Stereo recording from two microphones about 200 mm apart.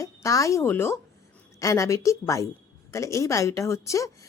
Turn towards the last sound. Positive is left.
turn(degrees=15)  # may be behind; listen again after turning